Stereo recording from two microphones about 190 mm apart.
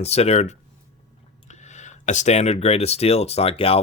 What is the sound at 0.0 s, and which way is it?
Speech, 35° left (ahead or behind).